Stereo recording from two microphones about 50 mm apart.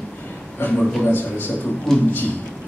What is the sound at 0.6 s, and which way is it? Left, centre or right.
Speech, left.